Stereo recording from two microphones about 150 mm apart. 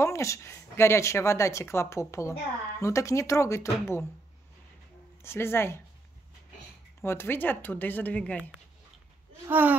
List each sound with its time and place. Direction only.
0.0 s speech: 20° left (ahead or behind)
5.2 s a woman's voice: 15° left (ahead or behind)
7.0 s a woman's voice: 15° left (ahead or behind)
9.5 s speech: 10° right (ahead or behind)